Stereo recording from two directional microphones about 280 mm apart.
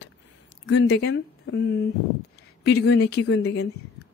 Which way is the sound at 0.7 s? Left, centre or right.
Left.